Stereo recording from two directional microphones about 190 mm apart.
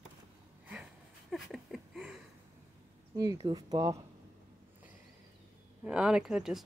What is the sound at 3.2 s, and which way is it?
Speech, 20° right (ahead or behind).